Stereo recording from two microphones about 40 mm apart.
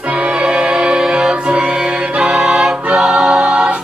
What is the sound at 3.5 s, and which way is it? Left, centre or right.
Music, right.